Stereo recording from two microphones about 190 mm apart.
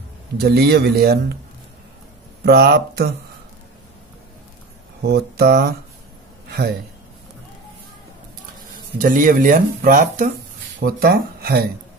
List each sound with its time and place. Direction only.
0.4 s speech: 55° right (ahead or behind)
2.4 s speech: 55° right (ahead or behind)
5.0 s speech: 60° right (ahead or behind)
8.9 s speech: 45° right (ahead or behind)